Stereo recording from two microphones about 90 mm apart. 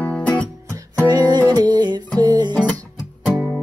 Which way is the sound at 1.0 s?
45° right (ahead or behind).